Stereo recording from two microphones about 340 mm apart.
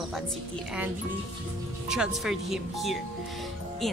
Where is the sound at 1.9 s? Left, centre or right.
Centre.